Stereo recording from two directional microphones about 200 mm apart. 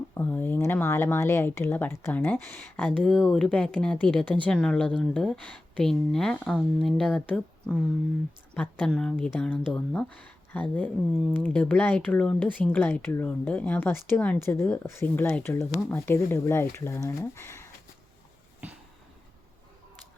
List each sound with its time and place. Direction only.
0.1 s speech: 10° left (ahead or behind)